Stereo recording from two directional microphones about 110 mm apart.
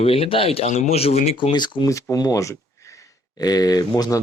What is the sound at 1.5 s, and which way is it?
Speech, 45° left (ahead or behind).